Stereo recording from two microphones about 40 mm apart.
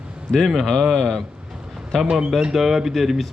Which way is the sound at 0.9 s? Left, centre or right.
Centre.